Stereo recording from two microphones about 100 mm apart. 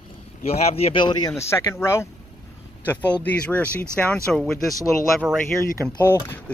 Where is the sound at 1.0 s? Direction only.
50° left (ahead or behind).